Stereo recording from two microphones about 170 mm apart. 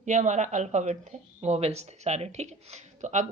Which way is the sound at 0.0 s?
45° right (ahead or behind).